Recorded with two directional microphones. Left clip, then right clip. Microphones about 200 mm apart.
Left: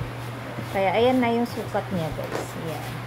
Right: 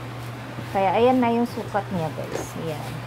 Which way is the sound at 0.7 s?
25° right (ahead or behind).